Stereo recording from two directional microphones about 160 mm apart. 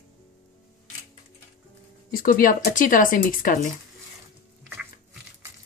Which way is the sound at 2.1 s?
65° left (ahead or behind).